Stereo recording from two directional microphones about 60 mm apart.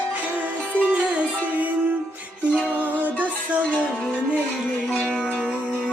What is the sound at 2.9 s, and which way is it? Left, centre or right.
Music, right.